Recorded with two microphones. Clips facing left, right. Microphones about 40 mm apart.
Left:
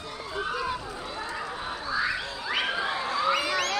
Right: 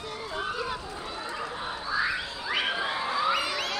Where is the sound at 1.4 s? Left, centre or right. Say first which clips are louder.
Even; centre.